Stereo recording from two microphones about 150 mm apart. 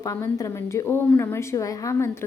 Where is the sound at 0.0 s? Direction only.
20° left (ahead or behind).